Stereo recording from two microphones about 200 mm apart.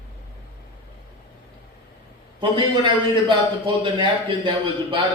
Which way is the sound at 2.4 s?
25° right (ahead or behind).